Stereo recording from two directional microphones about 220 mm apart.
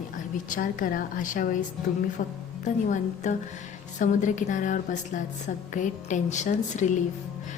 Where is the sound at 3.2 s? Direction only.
35° left (ahead or behind).